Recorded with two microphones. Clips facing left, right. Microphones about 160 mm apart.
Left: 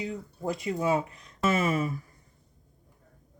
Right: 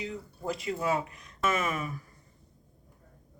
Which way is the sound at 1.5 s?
35° left (ahead or behind).